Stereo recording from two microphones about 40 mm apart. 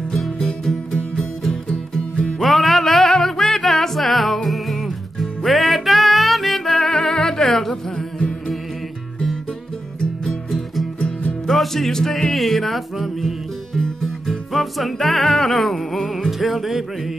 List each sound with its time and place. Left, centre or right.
0.4 s music: left
2.4 s music: centre
8.2 s music: left
11.0 s music: left
11.4 s music: centre